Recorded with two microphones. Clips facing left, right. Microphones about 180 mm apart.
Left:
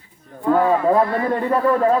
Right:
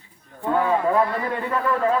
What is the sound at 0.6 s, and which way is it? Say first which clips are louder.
A man's voice: left 3 dB; 35° left (ahead or behind).